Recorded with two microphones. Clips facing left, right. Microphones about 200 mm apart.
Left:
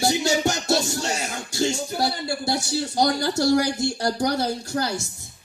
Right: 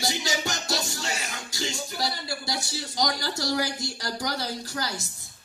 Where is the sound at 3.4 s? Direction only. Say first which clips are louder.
Left 8 dB; 45° left (ahead or behind).